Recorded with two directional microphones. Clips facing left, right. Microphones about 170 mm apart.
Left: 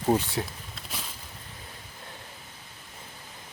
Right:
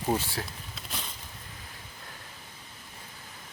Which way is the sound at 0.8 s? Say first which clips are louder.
Even; 5° left (ahead or behind).